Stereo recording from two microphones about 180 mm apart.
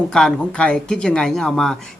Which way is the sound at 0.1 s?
5° left (ahead or behind).